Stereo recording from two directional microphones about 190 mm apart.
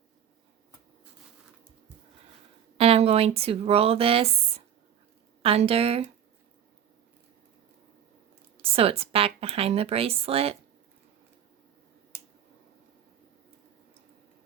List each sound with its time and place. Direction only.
2.7 s speech: 30° right (ahead or behind)
8.6 s speech: 30° right (ahead or behind)